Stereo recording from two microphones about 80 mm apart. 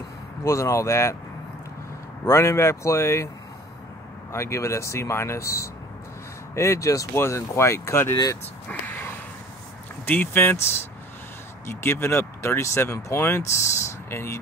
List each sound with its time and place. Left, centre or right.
0.4 s speech: left
2.2 s speech: left
4.3 s speech: left
8.6 s a sound: left
10.0 s speech: left
11.8 s speech: left